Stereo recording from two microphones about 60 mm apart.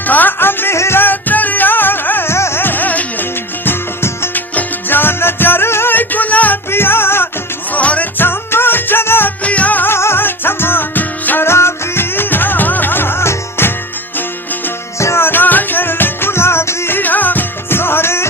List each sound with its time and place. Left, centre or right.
0.1 s music: left
2.3 s music: left
3.7 s music: left
4.4 s music: left
6.7 s music: left
7.7 s music: left
8.2 s music: left
9.4 s music: left
9.9 s music: left
11.4 s music: left
14.9 s music: left
17.0 s music: left